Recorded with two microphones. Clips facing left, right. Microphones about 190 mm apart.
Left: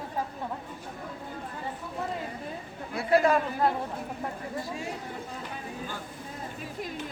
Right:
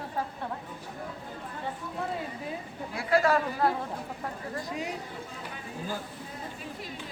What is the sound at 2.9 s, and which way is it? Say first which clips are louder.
Speech: left 2 dB; 20° left (ahead or behind).